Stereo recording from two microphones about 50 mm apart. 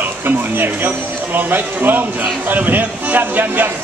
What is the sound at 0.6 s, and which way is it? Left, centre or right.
A man's voice, right.